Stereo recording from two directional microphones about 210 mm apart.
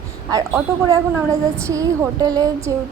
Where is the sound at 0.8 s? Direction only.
15° right (ahead or behind).